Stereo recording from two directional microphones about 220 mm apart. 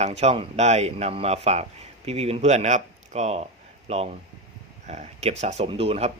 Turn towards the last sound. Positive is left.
turn(degrees=-25)  # may be behind; listen again after turning